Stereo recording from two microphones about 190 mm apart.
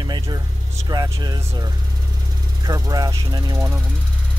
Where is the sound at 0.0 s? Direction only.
20° right (ahead or behind).